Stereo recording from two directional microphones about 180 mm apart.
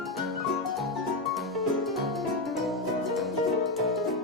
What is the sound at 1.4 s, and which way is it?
Music, centre (ahead or behind).